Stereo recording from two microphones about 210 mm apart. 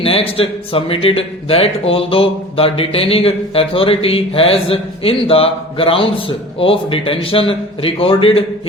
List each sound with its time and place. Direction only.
0.0 s a man's voice: 25° left (ahead or behind)